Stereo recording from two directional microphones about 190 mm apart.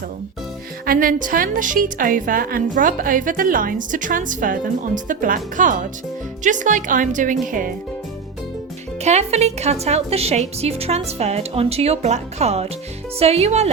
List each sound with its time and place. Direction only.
0.9 s a woman's voice: 45° right (ahead or behind)
9.0 s a woman's voice: 35° right (ahead or behind)